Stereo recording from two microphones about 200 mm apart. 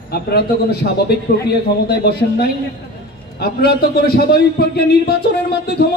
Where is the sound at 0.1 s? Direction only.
50° left (ahead or behind).